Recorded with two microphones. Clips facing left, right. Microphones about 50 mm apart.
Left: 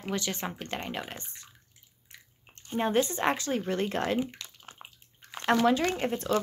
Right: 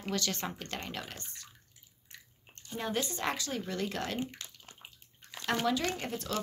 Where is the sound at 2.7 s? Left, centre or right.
Left.